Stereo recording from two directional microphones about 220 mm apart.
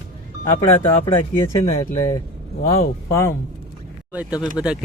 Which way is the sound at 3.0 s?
10° left (ahead or behind).